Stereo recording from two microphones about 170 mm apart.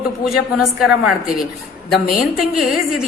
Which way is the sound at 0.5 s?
5° right (ahead or behind).